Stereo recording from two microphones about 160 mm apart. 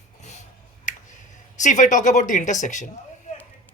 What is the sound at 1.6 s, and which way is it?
Speech, 50° left (ahead or behind).